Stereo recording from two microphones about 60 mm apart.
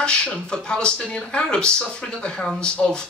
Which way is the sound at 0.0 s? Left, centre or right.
Centre.